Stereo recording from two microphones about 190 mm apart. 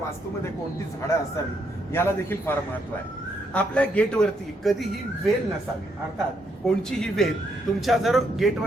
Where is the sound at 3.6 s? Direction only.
5° left (ahead or behind).